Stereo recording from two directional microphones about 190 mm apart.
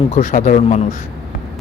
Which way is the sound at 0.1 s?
40° left (ahead or behind).